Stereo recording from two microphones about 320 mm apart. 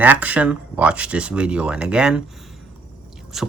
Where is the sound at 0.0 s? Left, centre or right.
Centre.